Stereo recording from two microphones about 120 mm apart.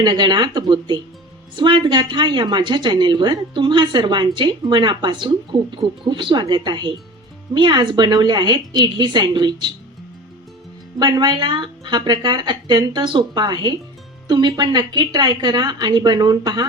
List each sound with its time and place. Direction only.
0.0 s a woman's voice: 40° right (ahead or behind)
11.0 s a woman's voice: 35° right (ahead or behind)